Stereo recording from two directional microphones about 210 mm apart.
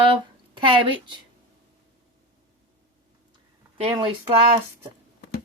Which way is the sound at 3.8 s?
25° right (ahead or behind).